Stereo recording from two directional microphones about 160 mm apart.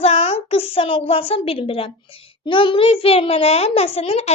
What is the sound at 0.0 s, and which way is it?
A woman's voice, 40° left (ahead or behind).